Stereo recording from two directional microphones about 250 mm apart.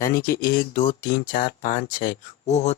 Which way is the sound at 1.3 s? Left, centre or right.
Left.